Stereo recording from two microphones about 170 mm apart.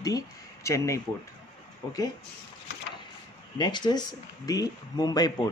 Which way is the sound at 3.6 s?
25° left (ahead or behind).